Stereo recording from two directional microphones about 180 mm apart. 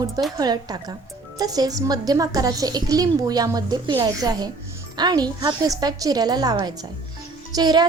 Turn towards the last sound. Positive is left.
turn(degrees=-20)  # may be behind; listen again after turning